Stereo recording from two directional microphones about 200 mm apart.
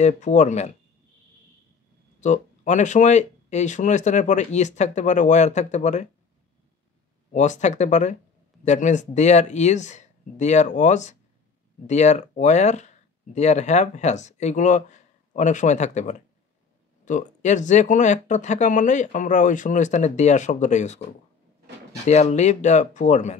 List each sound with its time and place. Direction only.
0.0 s speech: 35° left (ahead or behind)
2.1 s speech: 35° left (ahead or behind)
7.3 s speech: 35° left (ahead or behind)
22.0 s speech: 35° left (ahead or behind)